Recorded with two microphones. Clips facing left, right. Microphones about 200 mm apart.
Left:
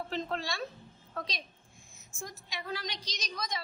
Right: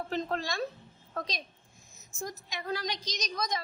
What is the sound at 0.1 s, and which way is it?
A woman's voice, 45° right (ahead or behind).